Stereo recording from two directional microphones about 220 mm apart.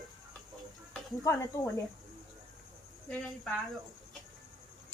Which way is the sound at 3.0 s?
5° left (ahead or behind).